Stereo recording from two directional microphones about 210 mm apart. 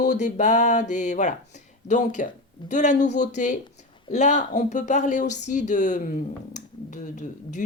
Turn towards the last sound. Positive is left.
turn(degrees=35)  # may be behind; listen again after turning